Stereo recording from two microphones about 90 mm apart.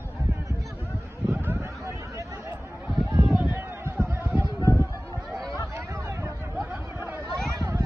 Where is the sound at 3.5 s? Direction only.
20° right (ahead or behind).